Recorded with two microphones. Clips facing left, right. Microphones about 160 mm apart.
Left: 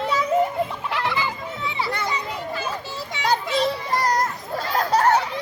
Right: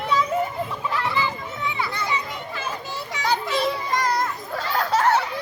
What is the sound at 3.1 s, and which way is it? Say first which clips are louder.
Music: left 1 dB; 30° left (ahead or behind).